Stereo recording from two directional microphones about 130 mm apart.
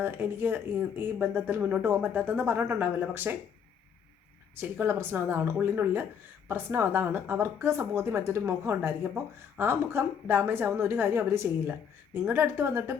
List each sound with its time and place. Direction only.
0.0 s speech: 15° right (ahead or behind)
4.5 s a woman's voice: 15° right (ahead or behind)